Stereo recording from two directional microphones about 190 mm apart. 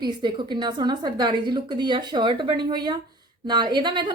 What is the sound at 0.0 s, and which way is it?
A woman's voice, 25° right (ahead or behind).